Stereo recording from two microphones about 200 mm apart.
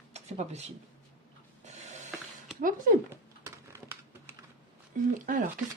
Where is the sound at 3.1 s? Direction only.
15° right (ahead or behind).